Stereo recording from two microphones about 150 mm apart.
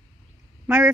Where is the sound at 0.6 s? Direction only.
15° right (ahead or behind).